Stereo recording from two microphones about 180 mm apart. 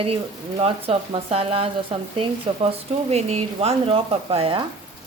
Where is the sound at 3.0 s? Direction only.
35° right (ahead or behind).